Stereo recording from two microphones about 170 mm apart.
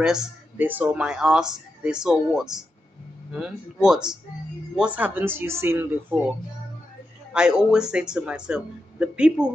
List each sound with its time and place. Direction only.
0.0 s speech: 5° right (ahead or behind)
7.3 s speech: 5° right (ahead or behind)